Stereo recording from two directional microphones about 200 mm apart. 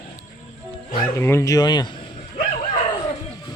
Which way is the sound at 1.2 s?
15° left (ahead or behind).